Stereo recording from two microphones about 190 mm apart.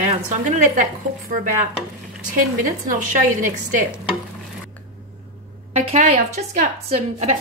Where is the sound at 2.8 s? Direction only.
45° right (ahead or behind).